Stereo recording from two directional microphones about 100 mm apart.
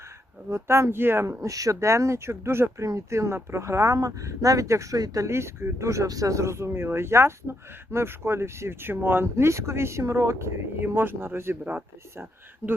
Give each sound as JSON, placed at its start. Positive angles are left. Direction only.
{"t": 0.5, "sound": "speech", "side_deg": -30}